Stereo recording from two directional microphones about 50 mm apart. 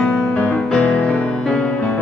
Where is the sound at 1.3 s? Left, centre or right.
Centre.